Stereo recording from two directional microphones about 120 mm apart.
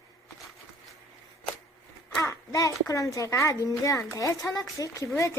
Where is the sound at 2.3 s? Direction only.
25° left (ahead or behind).